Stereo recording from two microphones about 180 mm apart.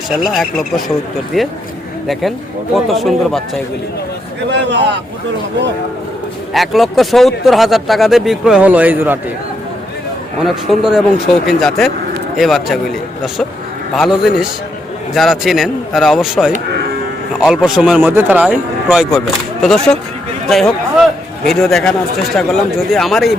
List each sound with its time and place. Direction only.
0.1 s speech: centre (ahead or behind)
2.7 s speech: centre (ahead or behind)
4.4 s speech: 70° right (ahead or behind)
6.5 s speech: centre (ahead or behind)
10.4 s speech: centre (ahead or behind)